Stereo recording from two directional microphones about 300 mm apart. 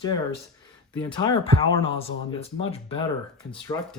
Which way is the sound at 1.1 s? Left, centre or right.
Centre.